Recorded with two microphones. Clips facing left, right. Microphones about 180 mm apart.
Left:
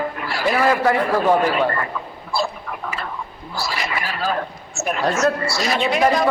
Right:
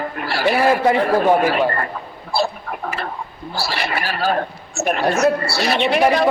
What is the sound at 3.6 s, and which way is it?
A woman's voice, 65° right (ahead or behind).